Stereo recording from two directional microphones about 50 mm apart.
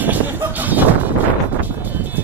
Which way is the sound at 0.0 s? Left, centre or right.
Right.